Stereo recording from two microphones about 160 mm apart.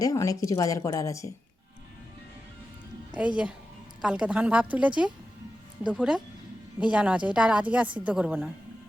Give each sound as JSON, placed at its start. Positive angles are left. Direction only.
{"t": 0.0, "sound": "a woman's voice", "side_deg": 20}
{"t": 3.2, "sound": "a woman's voice", "side_deg": -5}